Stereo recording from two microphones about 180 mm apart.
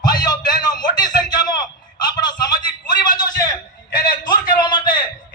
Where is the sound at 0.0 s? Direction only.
25° left (ahead or behind).